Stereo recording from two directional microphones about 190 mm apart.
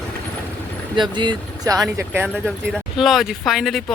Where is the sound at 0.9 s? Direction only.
25° right (ahead or behind).